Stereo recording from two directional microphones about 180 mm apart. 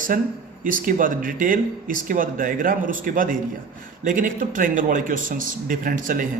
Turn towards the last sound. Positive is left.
turn(degrees=-50)  # may be behind; listen again after turning